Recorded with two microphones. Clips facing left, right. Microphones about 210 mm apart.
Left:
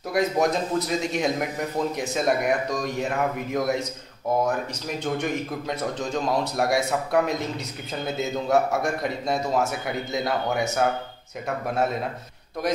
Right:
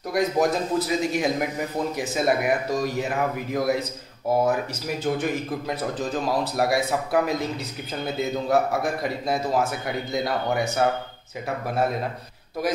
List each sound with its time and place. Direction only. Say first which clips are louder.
0.1 s a man's voice: even; centre (ahead or behind)